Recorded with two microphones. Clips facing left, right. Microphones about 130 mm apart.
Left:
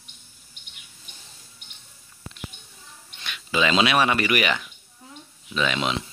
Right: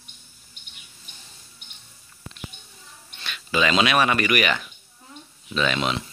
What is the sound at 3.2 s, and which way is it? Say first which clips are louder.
Speech: right 1 dB; 15° left (ahead or behind).